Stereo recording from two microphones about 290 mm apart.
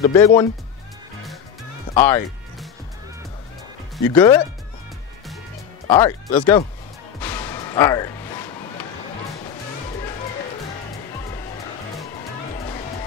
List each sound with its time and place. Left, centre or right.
0.0 s speech: centre
2.0 s music: centre
4.0 s speech: centre
5.9 s speech: centre
7.2 s music: centre
12.5 s music: centre